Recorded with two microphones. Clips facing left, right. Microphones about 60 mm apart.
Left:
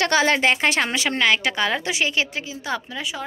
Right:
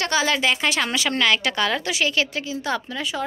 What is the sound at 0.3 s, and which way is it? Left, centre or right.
Speech, left.